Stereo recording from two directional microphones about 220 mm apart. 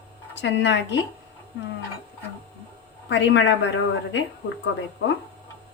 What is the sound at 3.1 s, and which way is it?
Speech, 55° left (ahead or behind).